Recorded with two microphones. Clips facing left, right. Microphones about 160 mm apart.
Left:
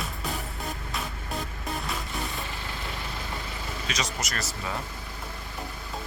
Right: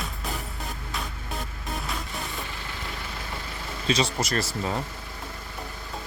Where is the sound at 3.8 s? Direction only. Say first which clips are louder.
Right 9 dB; 30° right (ahead or behind).